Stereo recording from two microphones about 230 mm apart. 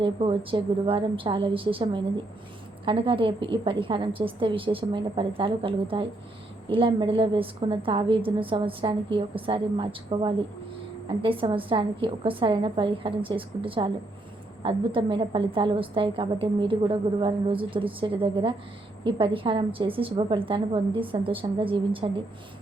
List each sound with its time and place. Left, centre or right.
0.0 s a woman's voice: right